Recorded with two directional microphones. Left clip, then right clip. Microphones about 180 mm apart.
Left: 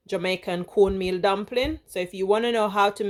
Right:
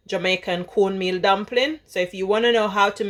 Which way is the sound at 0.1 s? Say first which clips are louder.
Right 4 dB; 40° left (ahead or behind).